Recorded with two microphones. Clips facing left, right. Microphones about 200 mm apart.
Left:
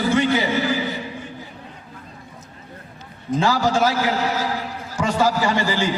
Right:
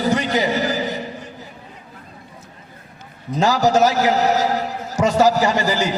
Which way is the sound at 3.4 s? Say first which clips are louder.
Right 4 dB; 40° right (ahead or behind).